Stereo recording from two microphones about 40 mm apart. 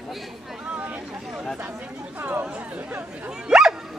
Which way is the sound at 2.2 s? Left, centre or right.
Right.